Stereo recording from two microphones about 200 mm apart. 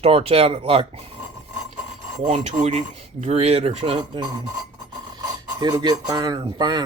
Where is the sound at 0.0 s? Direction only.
30° right (ahead or behind).